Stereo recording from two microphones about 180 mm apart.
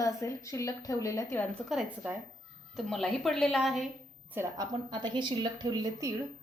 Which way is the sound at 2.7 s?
Centre (ahead or behind).